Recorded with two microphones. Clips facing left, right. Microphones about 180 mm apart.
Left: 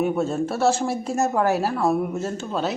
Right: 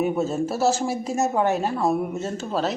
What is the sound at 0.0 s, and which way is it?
Speech, centre (ahead or behind).